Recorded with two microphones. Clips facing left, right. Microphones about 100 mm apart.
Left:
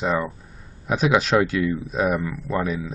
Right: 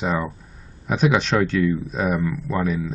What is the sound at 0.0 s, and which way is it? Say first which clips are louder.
Speech: left 1 dB; centre (ahead or behind).